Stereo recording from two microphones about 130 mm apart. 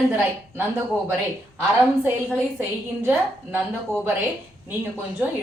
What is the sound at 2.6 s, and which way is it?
A woman's voice, 15° right (ahead or behind).